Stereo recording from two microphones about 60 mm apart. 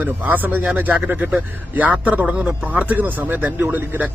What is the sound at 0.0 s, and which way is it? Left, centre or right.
A man's voice, right.